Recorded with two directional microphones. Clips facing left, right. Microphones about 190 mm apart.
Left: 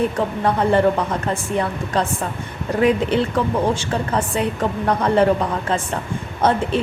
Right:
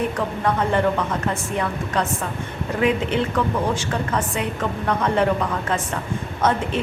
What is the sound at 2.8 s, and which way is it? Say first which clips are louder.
A woman's voice: left 3 dB; 35° left (ahead or behind).